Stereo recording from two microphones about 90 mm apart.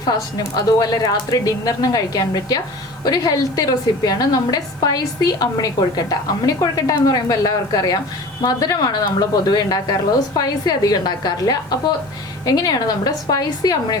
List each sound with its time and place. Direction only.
0.0 s a woman's voice: 45° left (ahead or behind)